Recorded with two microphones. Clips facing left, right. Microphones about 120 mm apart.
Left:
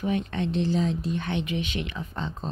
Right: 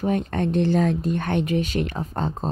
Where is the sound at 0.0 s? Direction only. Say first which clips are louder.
Right 4 dB; 40° right (ahead or behind).